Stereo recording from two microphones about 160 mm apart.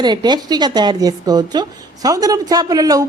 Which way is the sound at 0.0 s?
25° right (ahead or behind).